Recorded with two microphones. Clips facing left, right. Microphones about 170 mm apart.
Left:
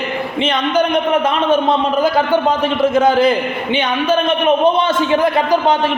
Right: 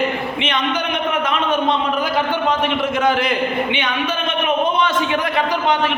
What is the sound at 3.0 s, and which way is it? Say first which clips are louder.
A man's voice: left 6 dB; 35° left (ahead or behind).